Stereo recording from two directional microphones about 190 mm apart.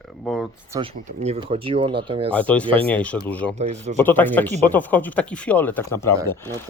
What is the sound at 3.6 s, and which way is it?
Speech, 35° right (ahead or behind).